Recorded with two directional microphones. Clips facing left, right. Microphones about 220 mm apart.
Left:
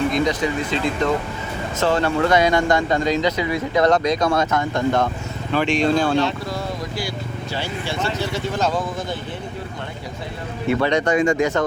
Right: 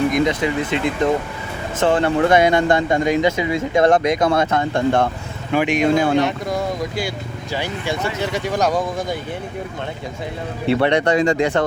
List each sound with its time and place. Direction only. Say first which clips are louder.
0.1 s speech: right 2 dB; 20° right (ahead or behind)
1.9 s speech: right 3 dB; 25° right (ahead or behind)
5.5 s speech: right 2 dB; 15° right (ahead or behind)
7.5 s speech: right 4 dB; 15° right (ahead or behind)
10.7 s speech: right 2 dB; 30° right (ahead or behind)